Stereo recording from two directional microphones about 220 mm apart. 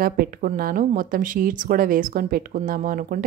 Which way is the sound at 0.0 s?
40° right (ahead or behind).